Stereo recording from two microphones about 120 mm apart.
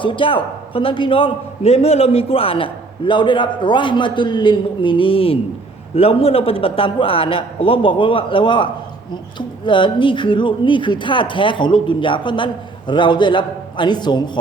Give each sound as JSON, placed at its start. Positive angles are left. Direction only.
{"t": 0.0, "sound": "a man's voice", "side_deg": 45}